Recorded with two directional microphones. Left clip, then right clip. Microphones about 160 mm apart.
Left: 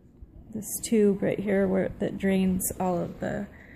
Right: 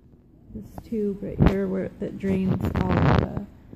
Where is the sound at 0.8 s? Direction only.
70° left (ahead or behind).